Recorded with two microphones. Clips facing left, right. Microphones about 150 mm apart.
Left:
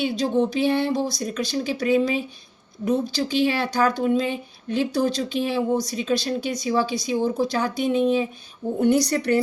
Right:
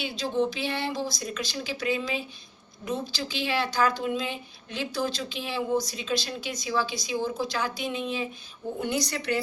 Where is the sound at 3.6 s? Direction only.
50° left (ahead or behind).